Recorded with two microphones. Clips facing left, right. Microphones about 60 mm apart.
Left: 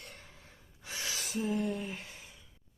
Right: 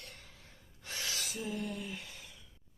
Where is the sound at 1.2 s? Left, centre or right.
Left.